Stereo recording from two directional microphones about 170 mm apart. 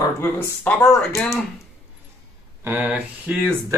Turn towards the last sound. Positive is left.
turn(degrees=-10)  # may be behind; listen again after turning